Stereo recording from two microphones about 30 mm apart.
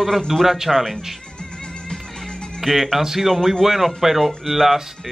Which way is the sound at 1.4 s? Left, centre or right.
Left.